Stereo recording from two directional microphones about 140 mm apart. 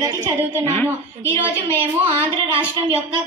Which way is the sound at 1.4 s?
15° right (ahead or behind).